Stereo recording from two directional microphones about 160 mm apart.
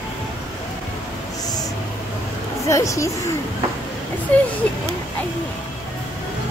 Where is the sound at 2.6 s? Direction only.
20° left (ahead or behind).